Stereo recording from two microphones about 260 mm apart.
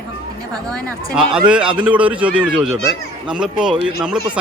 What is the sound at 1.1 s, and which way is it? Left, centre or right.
Speech, centre.